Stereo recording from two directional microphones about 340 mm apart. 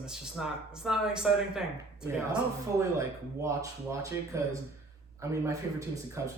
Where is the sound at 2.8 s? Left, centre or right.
Centre.